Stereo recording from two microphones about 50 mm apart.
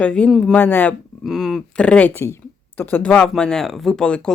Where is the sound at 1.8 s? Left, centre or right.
Left.